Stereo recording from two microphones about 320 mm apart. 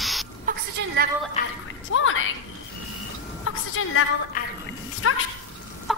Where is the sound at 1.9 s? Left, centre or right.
Left.